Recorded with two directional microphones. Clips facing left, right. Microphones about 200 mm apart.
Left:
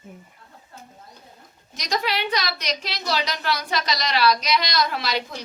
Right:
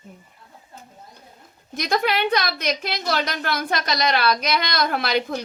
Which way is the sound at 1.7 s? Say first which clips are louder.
Right 4 dB; 55° right (ahead or behind).